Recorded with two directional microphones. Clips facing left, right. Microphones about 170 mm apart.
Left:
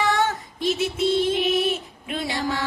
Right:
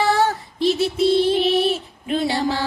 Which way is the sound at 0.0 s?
35° right (ahead or behind).